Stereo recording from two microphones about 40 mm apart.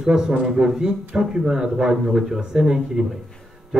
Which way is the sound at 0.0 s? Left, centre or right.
Centre.